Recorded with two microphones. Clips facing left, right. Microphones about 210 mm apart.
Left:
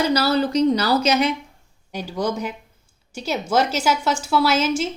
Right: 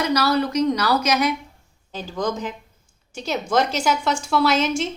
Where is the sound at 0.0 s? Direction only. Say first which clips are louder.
Left 1 dB; 30° left (ahead or behind).